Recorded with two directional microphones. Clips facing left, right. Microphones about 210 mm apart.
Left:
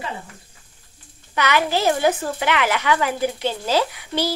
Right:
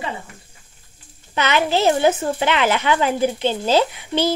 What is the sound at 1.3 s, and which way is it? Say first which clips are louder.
A woman's voice: right 2 dB; 25° right (ahead or behind).